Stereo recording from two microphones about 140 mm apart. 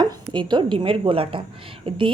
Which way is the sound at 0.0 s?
35° right (ahead or behind).